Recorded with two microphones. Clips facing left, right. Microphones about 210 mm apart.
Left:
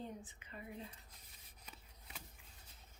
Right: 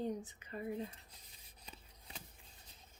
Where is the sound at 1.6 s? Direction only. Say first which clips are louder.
Right 3 dB; 30° right (ahead or behind).